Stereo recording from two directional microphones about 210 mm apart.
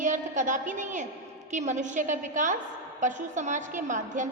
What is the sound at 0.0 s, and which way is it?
A woman's voice, 35° right (ahead or behind).